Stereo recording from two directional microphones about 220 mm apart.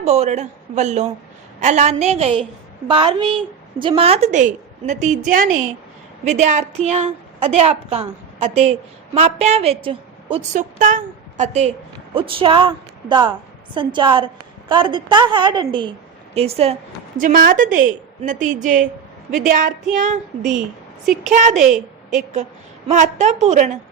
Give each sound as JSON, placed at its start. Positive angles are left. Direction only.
{"t": 0.0, "sound": "a woman's voice", "side_deg": -30}
{"t": 17.2, "sound": "a woman's voice", "side_deg": -40}
{"t": 21.5, "sound": "a woman's voice", "side_deg": 0}
{"t": 22.9, "sound": "a woman's voice", "side_deg": -30}